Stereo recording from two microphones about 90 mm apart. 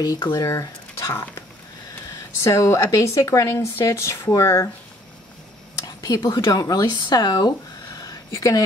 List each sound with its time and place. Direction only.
0.0 s speech: 45° left (ahead or behind)
2.4 s speech: 35° left (ahead or behind)
5.8 s speech: 45° left (ahead or behind)
8.0 s a sound: 40° left (ahead or behind)